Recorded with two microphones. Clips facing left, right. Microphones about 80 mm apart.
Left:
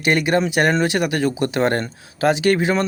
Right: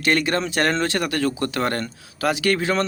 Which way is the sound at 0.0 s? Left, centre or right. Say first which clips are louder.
Left 3 dB; centre.